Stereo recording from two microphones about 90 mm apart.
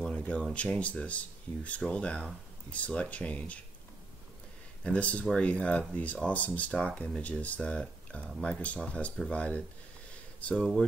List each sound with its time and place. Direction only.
0.5 s speech: 15° left (ahead or behind)
4.8 s speech: 15° left (ahead or behind)